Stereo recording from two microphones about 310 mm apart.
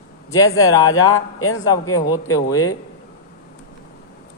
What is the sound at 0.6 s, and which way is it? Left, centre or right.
Mantra, centre.